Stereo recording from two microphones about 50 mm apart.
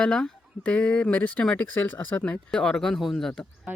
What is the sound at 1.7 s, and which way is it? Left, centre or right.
Speech, left.